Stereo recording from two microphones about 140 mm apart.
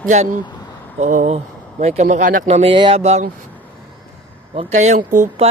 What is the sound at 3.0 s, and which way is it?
Speech, 50° right (ahead or behind).